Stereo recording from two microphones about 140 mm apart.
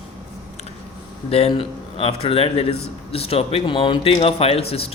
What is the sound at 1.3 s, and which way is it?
Speech, 45° left (ahead or behind).